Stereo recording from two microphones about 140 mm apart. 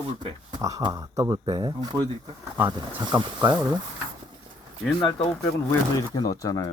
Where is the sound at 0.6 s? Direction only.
25° right (ahead or behind).